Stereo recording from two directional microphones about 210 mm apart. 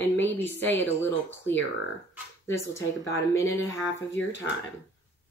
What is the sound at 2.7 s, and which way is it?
Speech, 15° left (ahead or behind).